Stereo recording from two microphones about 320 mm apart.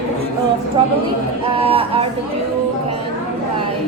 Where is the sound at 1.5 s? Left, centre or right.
Centre.